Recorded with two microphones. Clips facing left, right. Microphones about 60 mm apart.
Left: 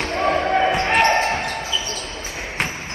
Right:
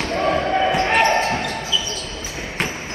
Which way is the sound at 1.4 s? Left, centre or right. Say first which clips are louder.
Right 1 dB; left.